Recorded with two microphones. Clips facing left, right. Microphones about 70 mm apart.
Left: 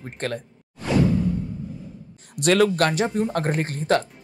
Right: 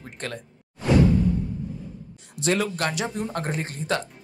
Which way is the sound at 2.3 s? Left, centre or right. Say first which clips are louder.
Left 6 dB; left.